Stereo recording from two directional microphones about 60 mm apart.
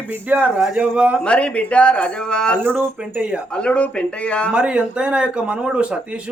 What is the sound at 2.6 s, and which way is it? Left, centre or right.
Speech, right.